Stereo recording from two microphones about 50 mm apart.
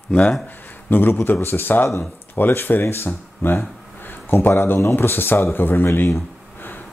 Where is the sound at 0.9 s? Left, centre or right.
Left.